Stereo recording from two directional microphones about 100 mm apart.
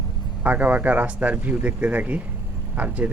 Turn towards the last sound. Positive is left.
turn(degrees=-15)  # may be behind; listen again after turning